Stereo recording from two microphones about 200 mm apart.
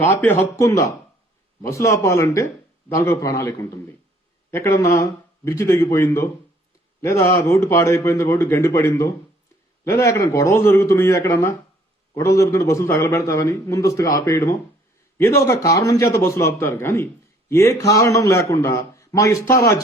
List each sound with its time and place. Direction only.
0.0 s a man's voice: 10° left (ahead or behind)